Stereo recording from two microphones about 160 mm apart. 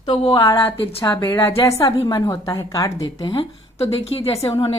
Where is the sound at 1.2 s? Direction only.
15° left (ahead or behind).